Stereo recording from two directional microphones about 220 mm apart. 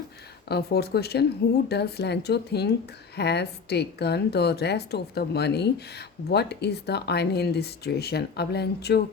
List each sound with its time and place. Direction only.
0.4 s a woman's voice: 45° left (ahead or behind)